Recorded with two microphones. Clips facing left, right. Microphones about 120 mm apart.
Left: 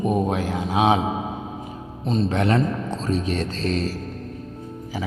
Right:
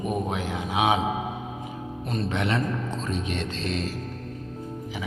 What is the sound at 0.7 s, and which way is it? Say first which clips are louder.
Speech: left 4 dB; 30° left (ahead or behind).